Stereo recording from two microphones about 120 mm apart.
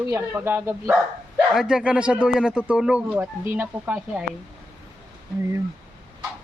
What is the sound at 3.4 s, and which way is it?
Speech, 20° right (ahead or behind).